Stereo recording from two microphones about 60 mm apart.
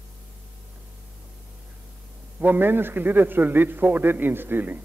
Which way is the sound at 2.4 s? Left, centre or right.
Right.